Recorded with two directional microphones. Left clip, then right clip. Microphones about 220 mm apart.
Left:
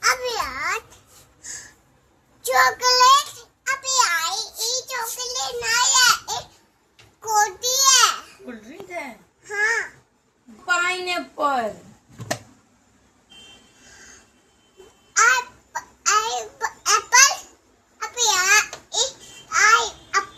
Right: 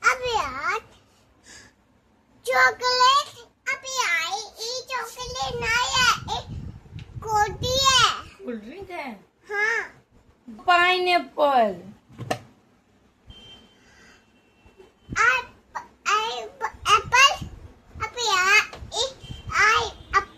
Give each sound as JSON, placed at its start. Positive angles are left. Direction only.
{"t": 0.1, "sound": "babbling", "side_deg": -20}
{"t": 2.5, "sound": "child singing", "side_deg": -5}
{"t": 3.6, "sound": "a sound", "side_deg": -15}
{"t": 7.3, "sound": "child singing", "side_deg": -10}
{"t": 9.5, "sound": "babbling", "side_deg": -10}
{"t": 10.7, "sound": "a sound", "side_deg": -45}
{"t": 15.2, "sound": "babbling", "side_deg": 0}
{"t": 18.0, "sound": "a sound", "side_deg": -15}
{"t": 19.5, "sound": "babbling", "side_deg": -10}